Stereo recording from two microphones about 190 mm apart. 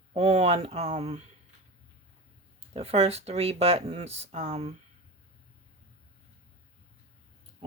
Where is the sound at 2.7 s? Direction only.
30° right (ahead or behind).